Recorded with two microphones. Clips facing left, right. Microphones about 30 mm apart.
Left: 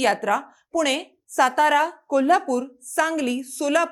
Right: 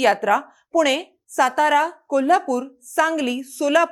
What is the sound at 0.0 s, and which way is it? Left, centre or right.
A woman's voice, centre.